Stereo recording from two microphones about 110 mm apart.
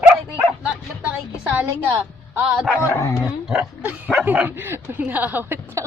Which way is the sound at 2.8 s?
25° left (ahead or behind).